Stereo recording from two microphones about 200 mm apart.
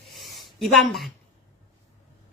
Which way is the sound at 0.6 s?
Centre (ahead or behind).